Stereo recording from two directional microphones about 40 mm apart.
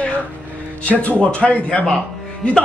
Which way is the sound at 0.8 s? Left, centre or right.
Left.